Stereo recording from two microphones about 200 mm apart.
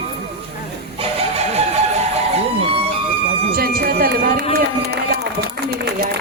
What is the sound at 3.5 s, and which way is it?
Run, 50° right (ahead or behind).